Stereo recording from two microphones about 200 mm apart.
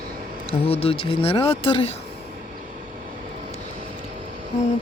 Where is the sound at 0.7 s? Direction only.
30° left (ahead or behind).